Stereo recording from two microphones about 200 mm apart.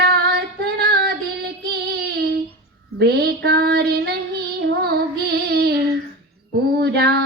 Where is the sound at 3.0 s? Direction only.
55° right (ahead or behind).